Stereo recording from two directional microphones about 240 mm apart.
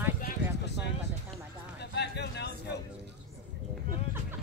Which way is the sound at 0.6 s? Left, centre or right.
Left.